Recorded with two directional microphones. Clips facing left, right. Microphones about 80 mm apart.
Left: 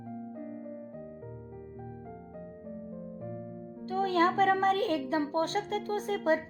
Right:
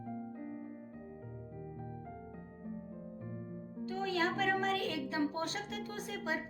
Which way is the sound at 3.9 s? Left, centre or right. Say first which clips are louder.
Left 8 dB; left.